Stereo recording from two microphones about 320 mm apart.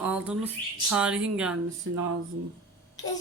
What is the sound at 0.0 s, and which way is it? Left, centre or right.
Speech, centre.